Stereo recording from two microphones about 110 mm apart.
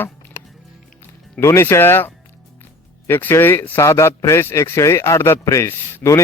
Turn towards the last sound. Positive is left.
turn(degrees=25)  # may be behind; listen again after turning